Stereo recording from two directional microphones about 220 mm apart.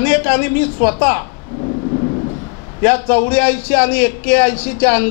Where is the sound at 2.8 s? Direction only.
10° left (ahead or behind).